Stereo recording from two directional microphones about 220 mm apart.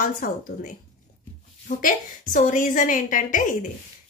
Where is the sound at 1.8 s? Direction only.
40° left (ahead or behind).